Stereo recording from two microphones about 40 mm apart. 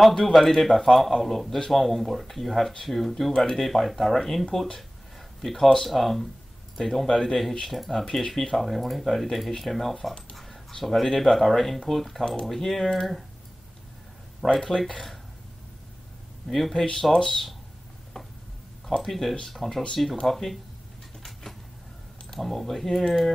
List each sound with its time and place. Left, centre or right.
0.2 s speech: centre
14.4 s speech: centre
16.7 s speech: centre
18.9 s speech: centre
21.2 s a sound: centre
22.3 s speech: centre